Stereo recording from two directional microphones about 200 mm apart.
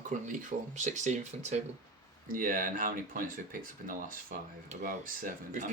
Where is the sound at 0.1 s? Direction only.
40° right (ahead or behind).